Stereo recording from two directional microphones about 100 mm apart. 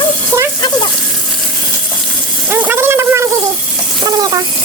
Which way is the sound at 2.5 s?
20° right (ahead or behind).